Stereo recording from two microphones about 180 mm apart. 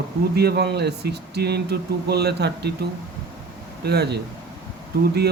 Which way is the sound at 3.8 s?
65° right (ahead or behind).